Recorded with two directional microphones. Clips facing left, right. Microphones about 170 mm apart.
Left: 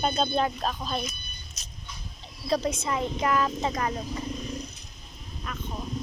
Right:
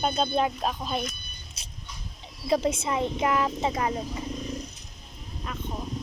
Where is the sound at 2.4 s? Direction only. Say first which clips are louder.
Right 2 dB; 25° right (ahead or behind).